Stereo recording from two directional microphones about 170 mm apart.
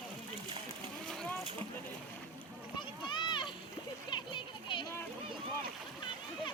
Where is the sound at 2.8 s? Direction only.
25° left (ahead or behind).